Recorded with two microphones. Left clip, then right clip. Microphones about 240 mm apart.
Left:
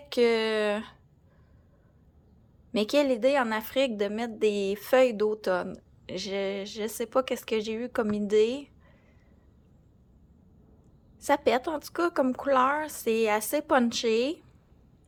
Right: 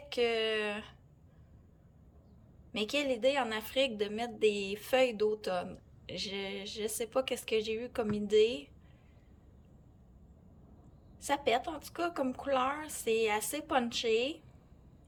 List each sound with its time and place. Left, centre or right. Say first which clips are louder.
0.1 s a woman's voice: left 7 dB; left
2.7 s a woman's voice: left 8 dB; left
11.2 s a woman's voice: left 6 dB; centre